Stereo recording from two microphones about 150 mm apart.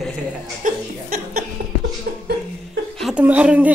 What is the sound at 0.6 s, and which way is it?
Chuckle, 70° right (ahead or behind).